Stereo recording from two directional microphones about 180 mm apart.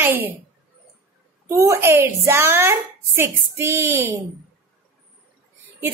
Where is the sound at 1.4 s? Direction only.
15° right (ahead or behind).